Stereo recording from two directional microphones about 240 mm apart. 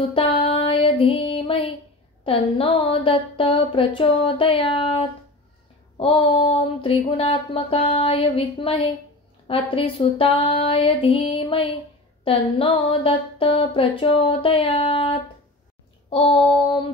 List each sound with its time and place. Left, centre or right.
0.1 s child singing: left
1.2 s music: left
2.2 s a sound: left